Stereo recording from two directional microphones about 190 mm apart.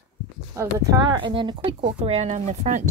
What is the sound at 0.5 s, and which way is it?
Speech, 15° right (ahead or behind).